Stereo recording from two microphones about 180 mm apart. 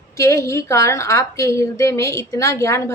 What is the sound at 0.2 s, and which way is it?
A woman's voice, 15° left (ahead or behind).